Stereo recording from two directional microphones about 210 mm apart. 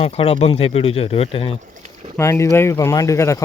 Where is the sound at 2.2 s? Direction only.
15° left (ahead or behind).